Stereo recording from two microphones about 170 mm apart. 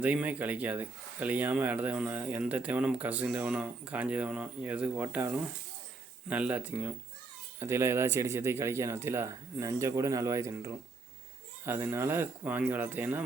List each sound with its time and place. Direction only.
0.0 s speech: 10° right (ahead or behind)